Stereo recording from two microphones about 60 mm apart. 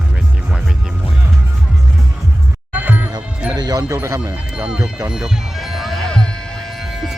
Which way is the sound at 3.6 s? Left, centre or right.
Right.